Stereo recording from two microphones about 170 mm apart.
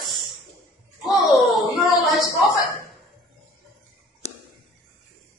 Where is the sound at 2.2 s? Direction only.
20° left (ahead or behind).